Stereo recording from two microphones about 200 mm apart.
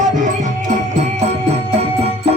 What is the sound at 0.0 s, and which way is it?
Music, 40° right (ahead or behind).